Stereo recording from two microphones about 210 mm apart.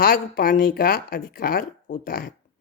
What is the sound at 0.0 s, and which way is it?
Speech, 40° left (ahead or behind).